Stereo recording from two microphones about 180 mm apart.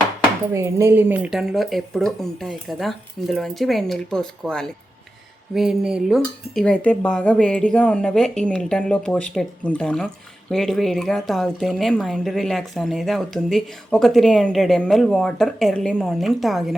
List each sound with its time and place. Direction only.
0.5 s speech: 15° right (ahead or behind)